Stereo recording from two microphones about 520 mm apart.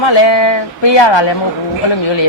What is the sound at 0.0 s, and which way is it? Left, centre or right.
A woman's voice, left.